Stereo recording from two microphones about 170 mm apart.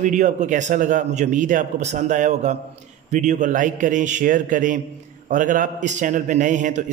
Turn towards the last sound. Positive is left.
turn(degrees=-50)  # may be behind; listen again after turning